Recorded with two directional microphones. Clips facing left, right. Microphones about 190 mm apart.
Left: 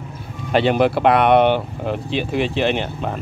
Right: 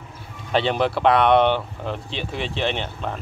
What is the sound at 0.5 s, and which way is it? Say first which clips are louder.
Speech: left 5 dB; 10° left (ahead or behind).